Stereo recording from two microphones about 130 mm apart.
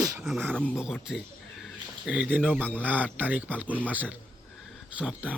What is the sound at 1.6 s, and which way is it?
A man's voice, 10° right (ahead or behind).